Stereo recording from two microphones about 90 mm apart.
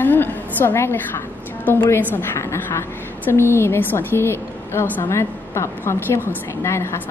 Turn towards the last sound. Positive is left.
turn(degrees=30)  # may be behind; listen again after turning